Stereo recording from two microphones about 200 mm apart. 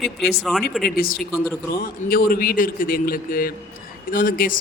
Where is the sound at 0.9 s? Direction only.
45° left (ahead or behind).